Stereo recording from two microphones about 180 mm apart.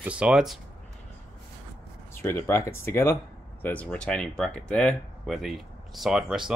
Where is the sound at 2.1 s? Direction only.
15° left (ahead or behind).